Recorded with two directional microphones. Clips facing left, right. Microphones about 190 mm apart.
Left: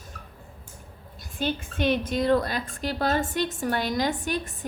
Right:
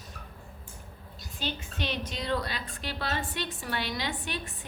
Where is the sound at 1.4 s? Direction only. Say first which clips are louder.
Left 9 dB; 50° left (ahead or behind).